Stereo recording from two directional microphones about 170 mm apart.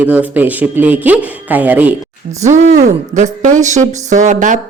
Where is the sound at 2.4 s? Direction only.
45° right (ahead or behind).